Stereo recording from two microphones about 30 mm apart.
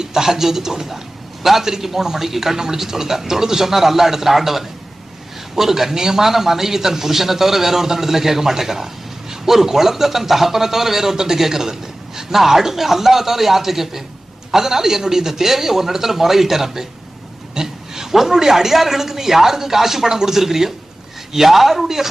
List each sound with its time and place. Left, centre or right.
0.0 s a man's voice: centre